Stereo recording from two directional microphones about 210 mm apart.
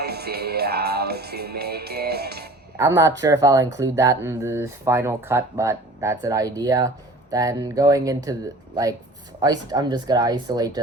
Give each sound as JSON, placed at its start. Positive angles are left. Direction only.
{"t": 0.0, "sound": "music", "side_deg": -50}
{"t": 2.7, "sound": "speech", "side_deg": -15}